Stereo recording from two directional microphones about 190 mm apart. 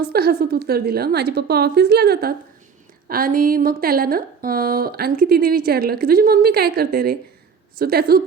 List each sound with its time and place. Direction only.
0.0 s a woman's voice: 55° right (ahead or behind)